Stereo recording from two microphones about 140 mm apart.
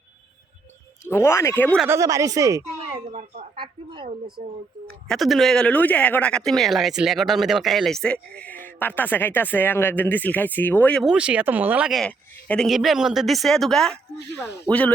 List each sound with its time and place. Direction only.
1.0 s speech: 20° left (ahead or behind)
1.9 s speech: 25° right (ahead or behind)
3.1 s speech: 60° right (ahead or behind)
3.5 s a sound: 35° right (ahead or behind)
4.4 s speech: 45° right (ahead or behind)
5.0 s speech: centre (ahead or behind)
11.0 s speech: 5° right (ahead or behind); by 14.9 s 10° left (ahead or behind)